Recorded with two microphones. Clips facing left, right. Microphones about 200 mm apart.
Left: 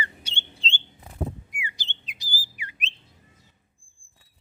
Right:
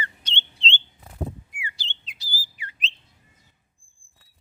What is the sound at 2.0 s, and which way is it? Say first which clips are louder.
Whistle: left 1 dB; 15° left (ahead or behind).